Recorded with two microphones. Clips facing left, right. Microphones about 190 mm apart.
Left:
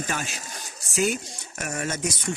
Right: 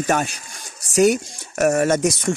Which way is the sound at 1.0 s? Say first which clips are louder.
Right 10 dB; 75° right (ahead or behind).